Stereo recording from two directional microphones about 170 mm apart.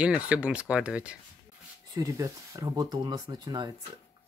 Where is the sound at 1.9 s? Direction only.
20° right (ahead or behind).